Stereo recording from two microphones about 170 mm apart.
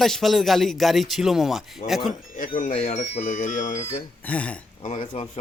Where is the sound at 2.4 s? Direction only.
50° left (ahead or behind).